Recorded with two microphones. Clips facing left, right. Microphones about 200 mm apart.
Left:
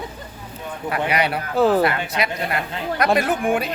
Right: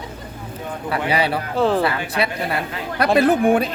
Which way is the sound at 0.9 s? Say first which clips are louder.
Right 1 dB; 30° right (ahead or behind).